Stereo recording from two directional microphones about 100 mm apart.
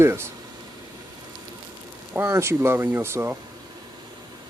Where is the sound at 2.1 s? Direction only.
25° right (ahead or behind).